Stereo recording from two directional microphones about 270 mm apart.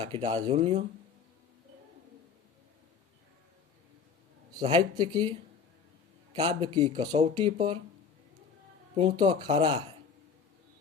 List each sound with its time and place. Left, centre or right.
0.0 s speech: centre
4.5 s speech: centre
9.0 s speech: centre